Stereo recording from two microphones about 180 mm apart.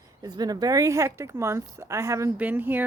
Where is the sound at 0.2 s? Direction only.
20° right (ahead or behind).